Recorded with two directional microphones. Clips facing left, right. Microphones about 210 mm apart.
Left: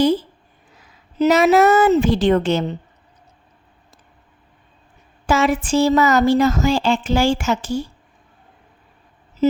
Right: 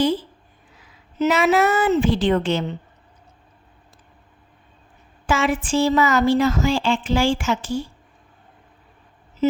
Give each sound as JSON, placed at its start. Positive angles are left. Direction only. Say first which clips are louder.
{"t": 1.2, "sound": "speech", "louder": "left 4 dB", "side_deg": 40}
{"t": 5.2, "sound": "speech", "louder": "left 3 dB", "side_deg": 40}
{"t": 9.4, "sound": "a sound", "louder": "left 3 dB", "side_deg": 40}